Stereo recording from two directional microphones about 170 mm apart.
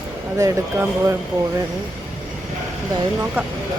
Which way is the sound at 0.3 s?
15° right (ahead or behind).